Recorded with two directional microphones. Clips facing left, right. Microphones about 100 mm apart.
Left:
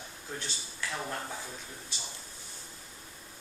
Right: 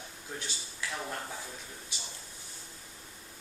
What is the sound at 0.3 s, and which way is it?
Speech, 10° right (ahead or behind).